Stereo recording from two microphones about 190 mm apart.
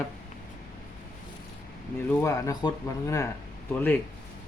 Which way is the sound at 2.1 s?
10° left (ahead or behind).